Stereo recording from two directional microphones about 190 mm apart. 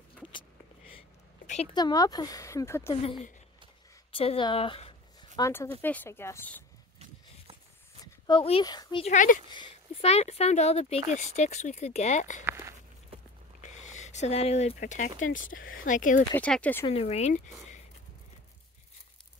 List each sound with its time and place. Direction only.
0.3 s a sound: 25° left (ahead or behind)
1.7 s speech: 20° left (ahead or behind)
2.9 s speech: 25° left (ahead or behind)
4.1 s a sound: 30° left (ahead or behind)
5.4 s speech: 15° left (ahead or behind)
8.0 s speech: 25° left (ahead or behind)
9.0 s speech: 40° left (ahead or behind)
9.5 s speech: 30° left (ahead or behind)
12.4 s a sound: 10° right (ahead or behind)
13.6 s speech: 40° left (ahead or behind)
15.3 s speech: 90° left
15.8 s speech: 45° left (ahead or behind)
16.3 s speech: 5° left (ahead or behind)
16.8 s speech: 30° left (ahead or behind)